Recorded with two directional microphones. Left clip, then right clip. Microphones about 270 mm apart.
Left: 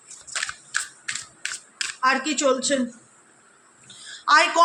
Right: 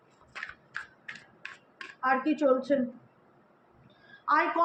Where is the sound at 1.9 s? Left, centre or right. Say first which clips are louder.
Left 5 dB; left.